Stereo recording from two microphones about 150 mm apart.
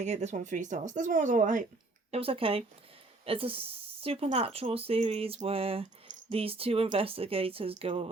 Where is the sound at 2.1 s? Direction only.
40° right (ahead or behind).